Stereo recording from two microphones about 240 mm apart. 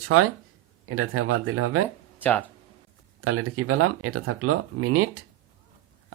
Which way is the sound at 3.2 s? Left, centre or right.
Right.